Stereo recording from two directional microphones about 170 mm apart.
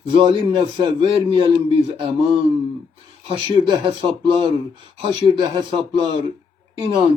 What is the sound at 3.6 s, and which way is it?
Speech, 30° right (ahead or behind).